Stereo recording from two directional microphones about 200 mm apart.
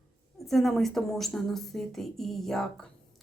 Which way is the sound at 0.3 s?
Centre (ahead or behind).